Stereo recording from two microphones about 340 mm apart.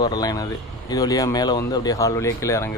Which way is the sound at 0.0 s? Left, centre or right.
Centre.